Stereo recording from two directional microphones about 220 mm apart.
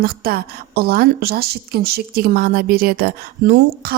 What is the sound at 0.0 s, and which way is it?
A woman's voice, 45° right (ahead or behind).